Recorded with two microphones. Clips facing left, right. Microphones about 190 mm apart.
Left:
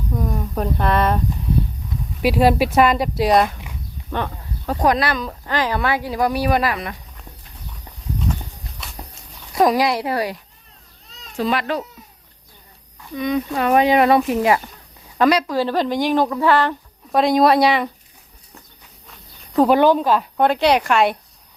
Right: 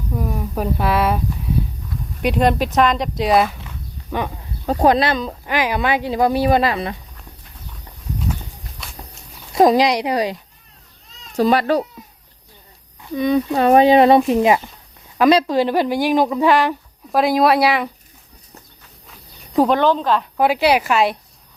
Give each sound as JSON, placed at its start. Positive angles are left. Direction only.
{"t": 0.2, "sound": "speech", "side_deg": -5}
{"t": 2.2, "sound": "speech", "side_deg": 5}
{"t": 4.6, "sound": "speech", "side_deg": -25}
{"t": 5.5, "sound": "speech", "side_deg": -15}
{"t": 9.6, "sound": "speech", "side_deg": -25}
{"t": 11.3, "sound": "speech", "side_deg": -40}
{"t": 13.1, "sound": "a woman's voice", "side_deg": -35}
{"t": 17.1, "sound": "speech", "side_deg": 0}
{"t": 19.6, "sound": "speech", "side_deg": 10}
{"t": 20.4, "sound": "speech", "side_deg": -5}